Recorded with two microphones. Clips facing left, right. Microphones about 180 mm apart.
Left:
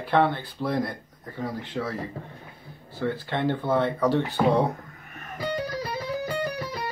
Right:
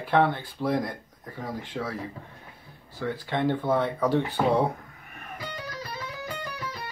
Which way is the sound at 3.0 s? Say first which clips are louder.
Left 1 dB; 5° right (ahead or behind).